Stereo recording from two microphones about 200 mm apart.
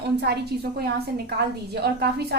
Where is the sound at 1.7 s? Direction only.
55° right (ahead or behind).